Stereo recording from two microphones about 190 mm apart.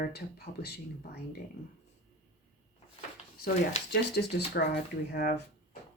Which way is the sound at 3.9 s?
60° left (ahead or behind).